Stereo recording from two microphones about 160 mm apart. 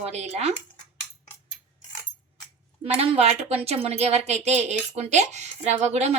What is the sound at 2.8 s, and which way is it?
A woman's voice, 40° right (ahead or behind).